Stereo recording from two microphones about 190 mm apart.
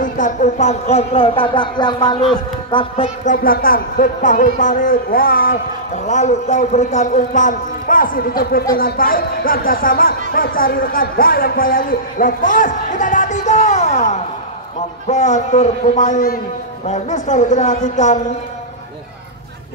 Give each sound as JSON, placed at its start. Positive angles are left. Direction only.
{"t": 0.0, "sound": "a man's voice", "side_deg": 40}
{"t": 3.3, "sound": "a man's voice", "side_deg": 50}